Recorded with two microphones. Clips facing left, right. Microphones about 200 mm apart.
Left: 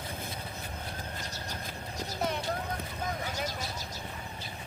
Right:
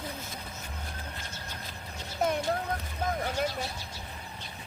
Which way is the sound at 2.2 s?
50° right (ahead or behind).